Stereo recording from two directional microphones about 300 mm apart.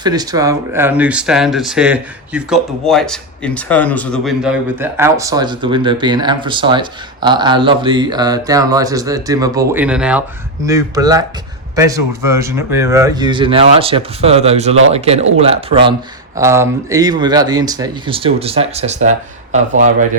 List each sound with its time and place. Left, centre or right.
0.0 s speech: centre